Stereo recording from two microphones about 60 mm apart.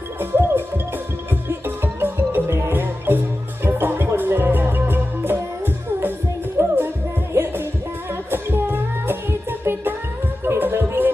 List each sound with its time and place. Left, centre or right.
0.2 s music: right